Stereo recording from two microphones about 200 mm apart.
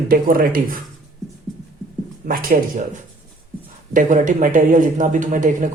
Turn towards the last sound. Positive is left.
turn(degrees=-40)  # may be behind; listen again after turning